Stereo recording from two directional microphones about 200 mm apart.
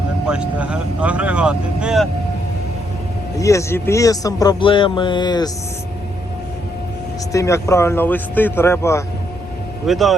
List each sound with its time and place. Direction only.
0.3 s speech: 5° right (ahead or behind)
3.3 s speech: 15° left (ahead or behind)
7.3 s speech: 15° left (ahead or behind)
9.8 s speech: centre (ahead or behind)